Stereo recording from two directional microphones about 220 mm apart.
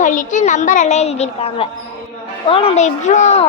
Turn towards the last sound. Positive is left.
turn(degrees=30)  # may be behind; listen again after turning